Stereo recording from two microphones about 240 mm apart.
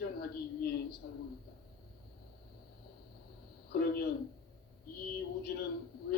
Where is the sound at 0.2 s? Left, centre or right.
Left.